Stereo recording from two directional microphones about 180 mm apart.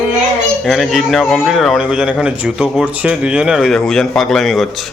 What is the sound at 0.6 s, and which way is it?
A man's voice, centre (ahead or behind).